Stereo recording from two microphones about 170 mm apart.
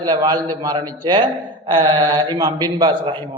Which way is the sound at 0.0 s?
25° right (ahead or behind).